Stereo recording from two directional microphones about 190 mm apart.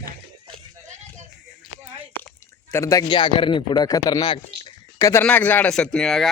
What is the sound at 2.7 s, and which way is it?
A man's voice, 15° left (ahead or behind).